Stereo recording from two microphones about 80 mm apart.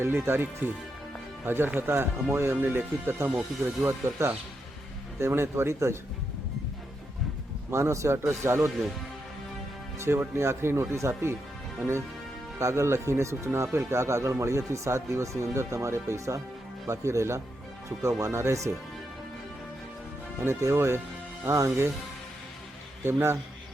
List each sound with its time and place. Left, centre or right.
0.0 s speech: right
7.7 s speech: right
10.0 s speech: right
12.5 s speech: right
20.4 s speech: right
23.0 s speech: right